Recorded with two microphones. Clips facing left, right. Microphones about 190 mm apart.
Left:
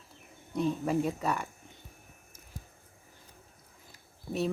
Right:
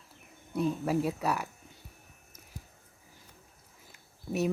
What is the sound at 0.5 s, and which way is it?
Speech, 5° right (ahead or behind).